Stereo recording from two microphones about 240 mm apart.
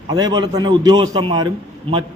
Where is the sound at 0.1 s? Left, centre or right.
Centre.